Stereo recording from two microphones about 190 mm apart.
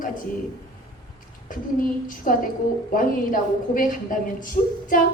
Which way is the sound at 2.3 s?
45° left (ahead or behind).